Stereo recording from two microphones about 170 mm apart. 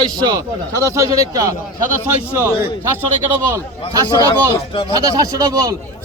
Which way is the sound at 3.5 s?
20° right (ahead or behind).